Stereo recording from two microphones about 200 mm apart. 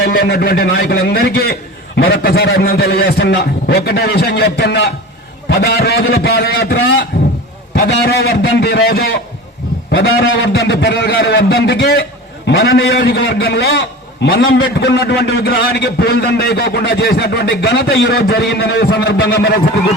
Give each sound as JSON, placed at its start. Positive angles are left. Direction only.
{"t": 0.0, "sound": "a man's voice", "side_deg": 50}